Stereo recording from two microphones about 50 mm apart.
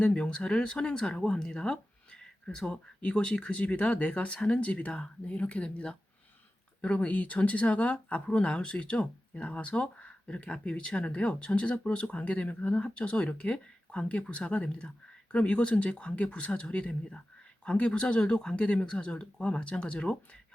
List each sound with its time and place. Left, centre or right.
0.0 s speech: left